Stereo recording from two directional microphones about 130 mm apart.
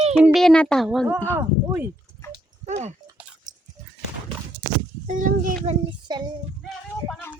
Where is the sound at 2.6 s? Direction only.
60° right (ahead or behind).